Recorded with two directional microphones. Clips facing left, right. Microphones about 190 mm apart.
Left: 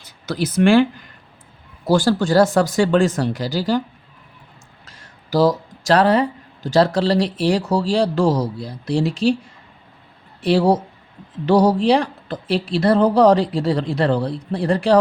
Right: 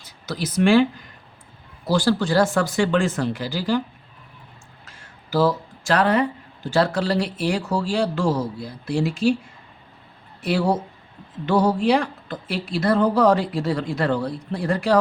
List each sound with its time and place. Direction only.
0.3 s speech: 55° left (ahead or behind)
1.9 s speech: 45° left (ahead or behind)
4.9 s speech: 40° left (ahead or behind)
10.4 s speech: 35° left (ahead or behind)